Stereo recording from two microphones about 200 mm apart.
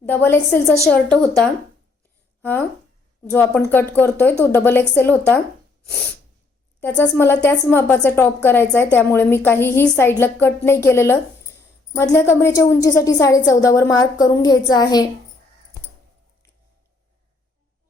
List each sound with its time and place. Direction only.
0.0 s a woman's voice: 10° left (ahead or behind)
2.4 s a woman's voice: 10° left (ahead or behind)
6.8 s a woman's voice: 10° left (ahead or behind)